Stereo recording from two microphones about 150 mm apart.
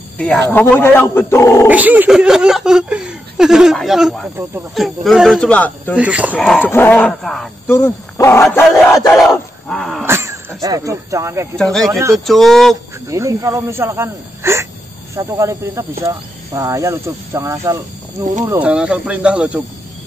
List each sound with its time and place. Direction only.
0.2 s speech: 10° left (ahead or behind)
1.7 s speech: 10° right (ahead or behind)
5.5 s speech: 10° left (ahead or behind)
5.9 s speech: 10° right (ahead or behind)
6.3 s speech: centre (ahead or behind)
6.6 s speech: 15° left (ahead or behind)
7.6 s speech: 15° left (ahead or behind)
9.1 s dog: centre (ahead or behind)
10.0 s speech: 15° right (ahead or behind)
11.5 s speech: 5° left (ahead or behind)
13.1 s speech: 20° right (ahead or behind)